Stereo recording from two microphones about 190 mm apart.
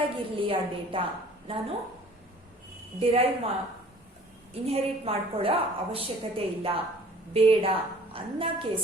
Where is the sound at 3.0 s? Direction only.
30° right (ahead or behind).